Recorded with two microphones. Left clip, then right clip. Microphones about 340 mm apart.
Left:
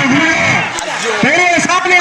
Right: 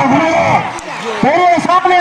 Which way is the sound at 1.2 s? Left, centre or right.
Right.